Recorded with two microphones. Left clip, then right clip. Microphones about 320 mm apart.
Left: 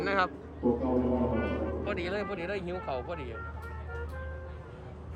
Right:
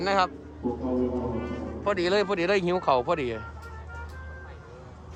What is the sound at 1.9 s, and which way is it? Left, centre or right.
Speech, centre.